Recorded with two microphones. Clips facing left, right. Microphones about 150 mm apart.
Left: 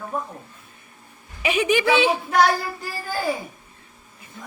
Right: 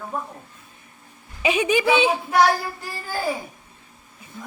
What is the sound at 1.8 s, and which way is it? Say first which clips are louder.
Speech: even; 10° right (ahead or behind).